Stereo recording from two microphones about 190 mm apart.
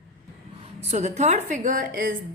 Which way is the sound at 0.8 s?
35° right (ahead or behind).